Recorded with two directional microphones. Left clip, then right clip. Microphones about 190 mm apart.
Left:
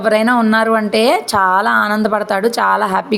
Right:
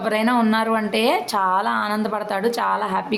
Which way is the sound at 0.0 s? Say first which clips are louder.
Left 7 dB; 25° left (ahead or behind).